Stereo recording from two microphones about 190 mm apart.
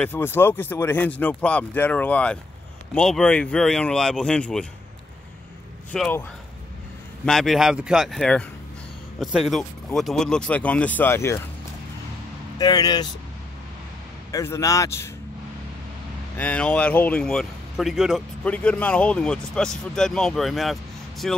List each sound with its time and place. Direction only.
0.0 s a man's voice: 10° left (ahead or behind)
5.9 s speech: 10° left (ahead or behind)
7.2 s a man's voice: centre (ahead or behind)
12.5 s speech: 20° left (ahead or behind)
14.3 s speech: 15° left (ahead or behind)
16.3 s a man's voice: 5° left (ahead or behind)